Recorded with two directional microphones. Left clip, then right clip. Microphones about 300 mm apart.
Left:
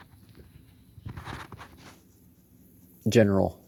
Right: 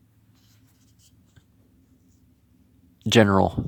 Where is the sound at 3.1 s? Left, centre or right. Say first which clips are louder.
Right 4 dB; centre.